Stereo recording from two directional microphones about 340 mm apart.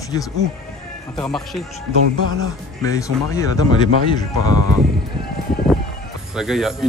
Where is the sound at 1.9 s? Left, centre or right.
Right.